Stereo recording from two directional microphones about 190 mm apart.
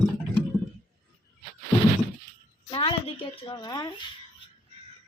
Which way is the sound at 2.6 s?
25° left (ahead or behind).